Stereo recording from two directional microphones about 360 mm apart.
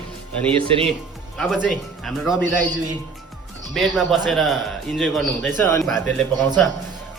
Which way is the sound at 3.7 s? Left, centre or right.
Centre.